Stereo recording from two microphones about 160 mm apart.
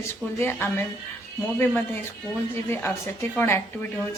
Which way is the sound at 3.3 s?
15° left (ahead or behind).